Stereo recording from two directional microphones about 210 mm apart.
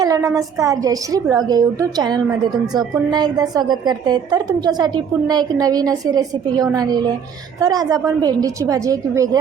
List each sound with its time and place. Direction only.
0.0 s a woman's voice: 15° right (ahead or behind)